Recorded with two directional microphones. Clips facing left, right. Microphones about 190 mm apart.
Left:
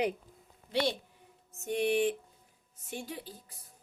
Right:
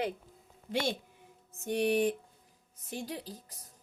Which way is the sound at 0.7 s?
50° right (ahead or behind).